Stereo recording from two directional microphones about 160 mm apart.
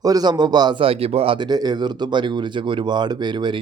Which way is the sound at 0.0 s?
25° right (ahead or behind).